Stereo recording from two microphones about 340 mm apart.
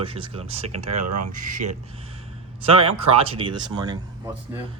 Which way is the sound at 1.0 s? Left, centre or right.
Right.